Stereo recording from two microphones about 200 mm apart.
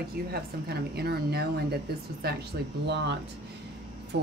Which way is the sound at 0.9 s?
50° right (ahead or behind).